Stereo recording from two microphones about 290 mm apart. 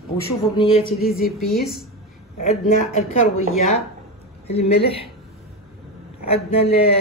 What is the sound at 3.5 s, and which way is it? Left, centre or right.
Speech, left.